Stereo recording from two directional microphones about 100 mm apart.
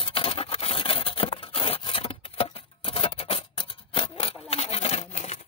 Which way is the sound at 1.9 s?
70° left (ahead or behind).